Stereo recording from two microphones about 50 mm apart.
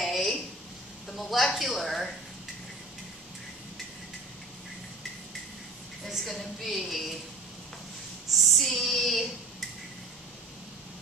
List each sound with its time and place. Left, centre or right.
0.0 s a sound: centre
1.1 s speech: centre
6.0 s a woman's voice: centre
8.4 s child singing: centre